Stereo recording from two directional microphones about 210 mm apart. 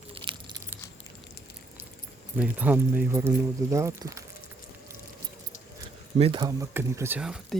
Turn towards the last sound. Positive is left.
turn(degrees=-5)  # may be behind; listen again after turning